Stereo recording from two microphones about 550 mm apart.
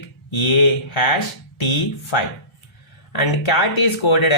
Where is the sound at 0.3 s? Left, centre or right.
Left.